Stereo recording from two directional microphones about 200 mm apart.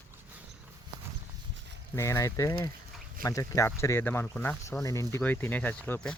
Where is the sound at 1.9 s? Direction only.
15° left (ahead or behind).